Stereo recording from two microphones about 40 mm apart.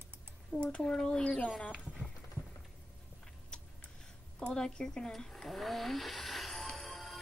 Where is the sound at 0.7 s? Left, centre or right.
Left.